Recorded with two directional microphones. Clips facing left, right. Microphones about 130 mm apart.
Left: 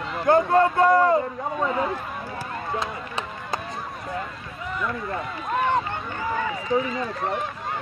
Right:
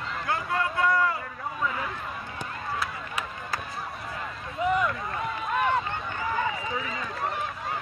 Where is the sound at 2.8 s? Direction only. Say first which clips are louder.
Left 3 dB; 25° left (ahead or behind).